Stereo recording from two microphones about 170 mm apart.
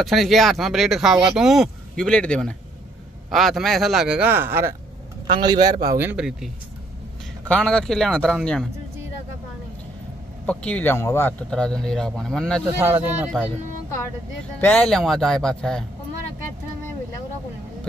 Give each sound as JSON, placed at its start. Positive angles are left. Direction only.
{"t": 0.0, "sound": "speech", "side_deg": 0}
{"t": 5.4, "sound": "speech", "side_deg": -25}
{"t": 5.9, "sound": "speech", "side_deg": -10}
{"t": 7.4, "sound": "speech", "side_deg": 5}
{"t": 10.4, "sound": "speech", "side_deg": 5}
{"t": 12.6, "sound": "speech", "side_deg": -15}
{"t": 14.6, "sound": "speech", "side_deg": 10}